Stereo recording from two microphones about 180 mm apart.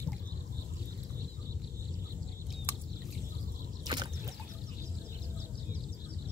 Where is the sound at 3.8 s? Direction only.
25° right (ahead or behind).